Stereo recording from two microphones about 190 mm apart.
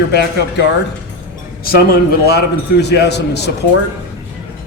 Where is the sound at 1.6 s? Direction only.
55° left (ahead or behind).